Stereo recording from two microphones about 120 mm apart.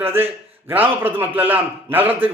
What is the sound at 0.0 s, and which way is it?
A man's voice, 15° right (ahead or behind).